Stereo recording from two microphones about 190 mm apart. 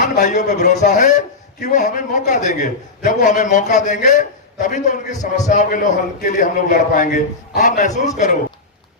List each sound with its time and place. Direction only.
0.0 s a man's voice: 40° left (ahead or behind)